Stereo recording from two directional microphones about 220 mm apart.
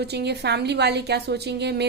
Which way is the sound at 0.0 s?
50° right (ahead or behind).